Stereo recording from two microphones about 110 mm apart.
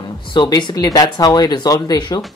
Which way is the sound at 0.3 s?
45° left (ahead or behind).